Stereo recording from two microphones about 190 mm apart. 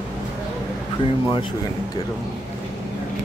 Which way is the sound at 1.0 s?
30° left (ahead or behind).